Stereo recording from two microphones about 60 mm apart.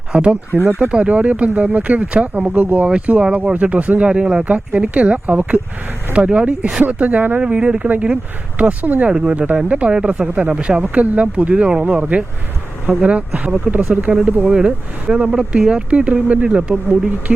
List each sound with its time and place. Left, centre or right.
0.1 s speech: right
0.5 s speech: right
0.8 s speech: right
6.1 s speech: centre
7.4 s speech: centre